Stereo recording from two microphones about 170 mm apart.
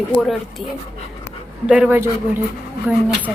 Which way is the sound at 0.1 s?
Centre (ahead or behind).